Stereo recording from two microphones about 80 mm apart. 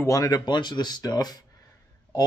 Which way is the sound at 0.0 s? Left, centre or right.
Left.